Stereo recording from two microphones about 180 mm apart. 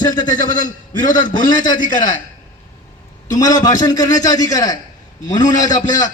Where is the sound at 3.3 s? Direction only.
20° left (ahead or behind).